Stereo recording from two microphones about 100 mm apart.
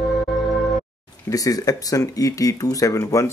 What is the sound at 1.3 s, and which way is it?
Speech, 35° left (ahead or behind).